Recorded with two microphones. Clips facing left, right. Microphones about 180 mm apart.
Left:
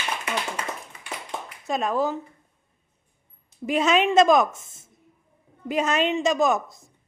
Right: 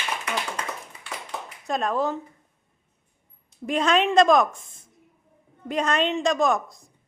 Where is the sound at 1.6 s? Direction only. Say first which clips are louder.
Left 1 dB; centre (ahead or behind).